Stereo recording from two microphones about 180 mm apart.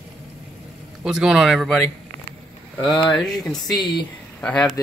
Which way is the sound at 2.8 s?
25° left (ahead or behind).